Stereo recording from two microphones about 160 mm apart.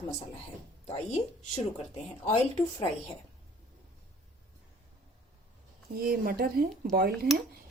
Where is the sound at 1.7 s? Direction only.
40° left (ahead or behind).